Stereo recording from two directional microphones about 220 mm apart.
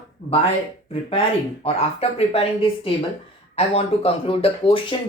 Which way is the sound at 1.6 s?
25° left (ahead or behind).